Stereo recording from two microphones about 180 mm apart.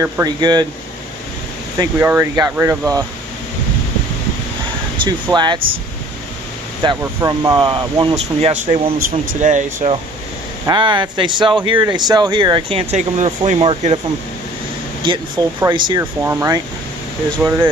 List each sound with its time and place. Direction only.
0.0 s speech: 20° right (ahead or behind)
1.8 s speech: 10° right (ahead or behind)
5.0 s speech: 25° right (ahead or behind)
7.0 s speech: 20° right (ahead or behind)
8.9 s speech: 90° right
9.4 s speech: 45° right (ahead or behind)
10.7 s speech: 25° right (ahead or behind)
15.0 s speech: 25° right (ahead or behind); by 17.6 s 10° right (ahead or behind)